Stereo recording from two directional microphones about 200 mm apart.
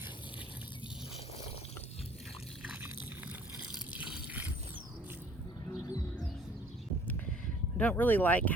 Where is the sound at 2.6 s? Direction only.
10° right (ahead or behind).